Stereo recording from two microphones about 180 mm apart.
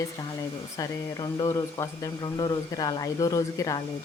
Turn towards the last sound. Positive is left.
turn(degrees=20)  # may be behind; listen again after turning